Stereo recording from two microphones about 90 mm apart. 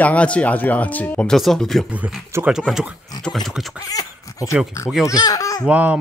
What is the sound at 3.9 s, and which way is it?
Speech, 40° left (ahead or behind).